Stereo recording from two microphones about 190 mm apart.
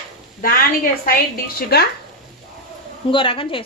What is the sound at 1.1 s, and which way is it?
Speech, 50° left (ahead or behind).